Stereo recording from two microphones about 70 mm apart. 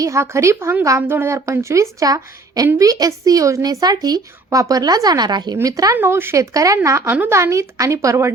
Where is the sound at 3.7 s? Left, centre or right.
Right.